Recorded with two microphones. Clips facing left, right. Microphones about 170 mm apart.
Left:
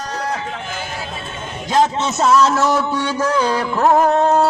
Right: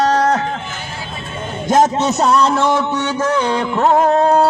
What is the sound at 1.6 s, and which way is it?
Speech, 45° right (ahead or behind).